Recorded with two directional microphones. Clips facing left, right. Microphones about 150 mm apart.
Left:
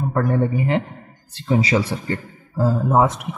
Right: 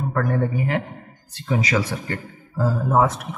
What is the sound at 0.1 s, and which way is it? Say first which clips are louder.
A man's voice: left 3 dB; 25° left (ahead or behind).